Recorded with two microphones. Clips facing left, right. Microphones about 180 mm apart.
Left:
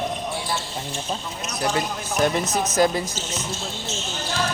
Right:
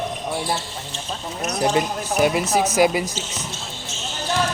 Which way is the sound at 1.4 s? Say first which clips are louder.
Right 6 dB; 20° right (ahead or behind).